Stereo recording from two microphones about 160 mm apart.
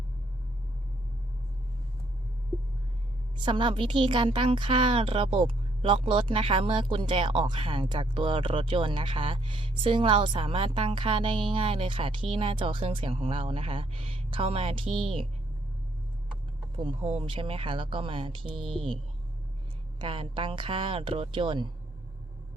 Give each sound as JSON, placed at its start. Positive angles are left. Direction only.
{"t": 3.3, "sound": "a woman's voice", "side_deg": -30}
{"t": 16.7, "sound": "a woman's voice", "side_deg": -30}
{"t": 18.4, "sound": "speech", "side_deg": 0}
{"t": 20.0, "sound": "a woman's voice", "side_deg": -30}